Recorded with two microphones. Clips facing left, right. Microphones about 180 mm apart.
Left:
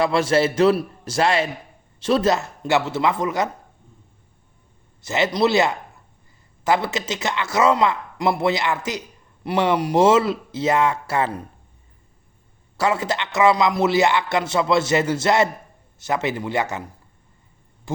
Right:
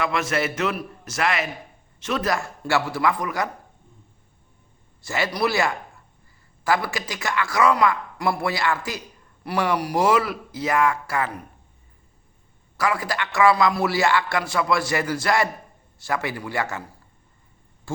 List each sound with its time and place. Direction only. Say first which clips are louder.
0.0 s a man's voice: left 6 dB; 30° left (ahead or behind)
5.0 s a man's voice: left 5 dB; 20° left (ahead or behind)
12.7 s a man's voice: left 3 dB; 25° left (ahead or behind)
17.9 s a sound: left 3 dB; 20° left (ahead or behind)